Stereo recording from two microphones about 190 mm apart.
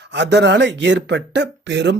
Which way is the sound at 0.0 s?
65° right (ahead or behind).